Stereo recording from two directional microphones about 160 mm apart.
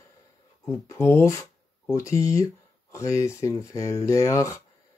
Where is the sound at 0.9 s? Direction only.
15° left (ahead or behind).